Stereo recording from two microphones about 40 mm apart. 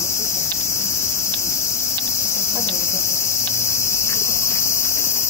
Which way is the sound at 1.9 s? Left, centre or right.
Left.